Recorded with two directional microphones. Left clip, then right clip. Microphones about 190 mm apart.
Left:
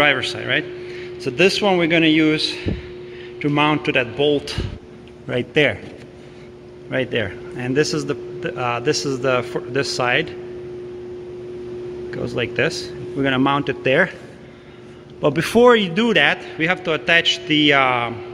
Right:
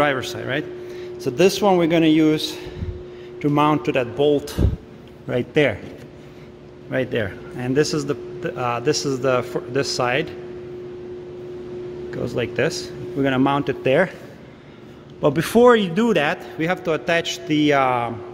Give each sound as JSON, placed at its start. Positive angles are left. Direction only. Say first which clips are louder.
{"t": 0.0, "sound": "a man's voice", "louder": "left 3 dB", "side_deg": -10}
{"t": 6.9, "sound": "a man's voice", "louder": "left 1 dB", "side_deg": -5}
{"t": 12.1, "sound": "a man's voice", "louder": "left 1 dB", "side_deg": -5}
{"t": 15.2, "sound": "a man's voice", "louder": "left 1 dB", "side_deg": -10}